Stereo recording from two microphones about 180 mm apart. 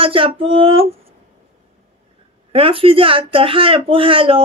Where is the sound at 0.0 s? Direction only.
30° right (ahead or behind).